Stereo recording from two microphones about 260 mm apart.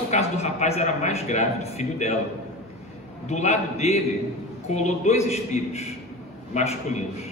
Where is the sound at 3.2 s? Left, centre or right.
Left.